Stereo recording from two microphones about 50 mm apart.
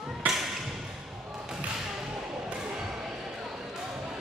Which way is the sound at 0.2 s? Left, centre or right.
Right.